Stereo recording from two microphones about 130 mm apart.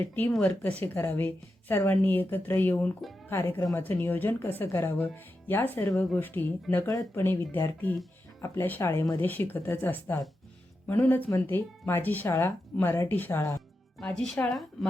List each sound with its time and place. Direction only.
0.0 s speech: 15° left (ahead or behind)
3.2 s speech: 20° left (ahead or behind)
14.0 s speech: 5° left (ahead or behind)